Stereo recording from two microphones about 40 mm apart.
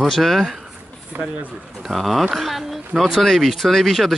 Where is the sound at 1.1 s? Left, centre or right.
Right.